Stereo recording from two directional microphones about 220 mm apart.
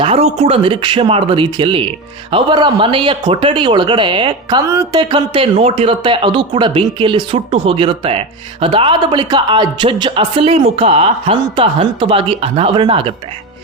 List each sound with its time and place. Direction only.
0.0 s a man's voice: 25° right (ahead or behind)